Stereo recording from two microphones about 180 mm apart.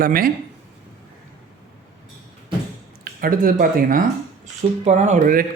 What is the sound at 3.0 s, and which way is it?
Speech, 55° right (ahead or behind).